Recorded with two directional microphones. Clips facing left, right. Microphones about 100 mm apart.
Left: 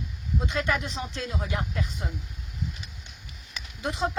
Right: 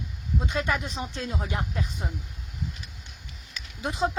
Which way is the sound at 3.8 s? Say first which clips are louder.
Right 1 dB; 15° right (ahead or behind).